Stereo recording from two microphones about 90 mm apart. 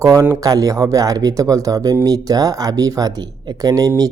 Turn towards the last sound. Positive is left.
turn(degrees=-45)  # may be behind; listen again after turning